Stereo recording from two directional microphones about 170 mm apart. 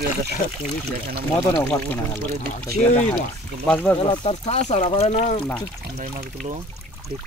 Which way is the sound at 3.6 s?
10° left (ahead or behind).